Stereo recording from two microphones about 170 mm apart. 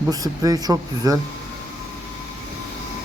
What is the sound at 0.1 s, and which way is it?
Speech, 20° right (ahead or behind).